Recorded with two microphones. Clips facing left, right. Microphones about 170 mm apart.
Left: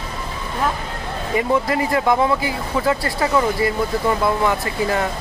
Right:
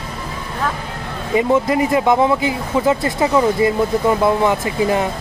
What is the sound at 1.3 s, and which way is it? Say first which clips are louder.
Speech: right 4 dB; 20° right (ahead or behind).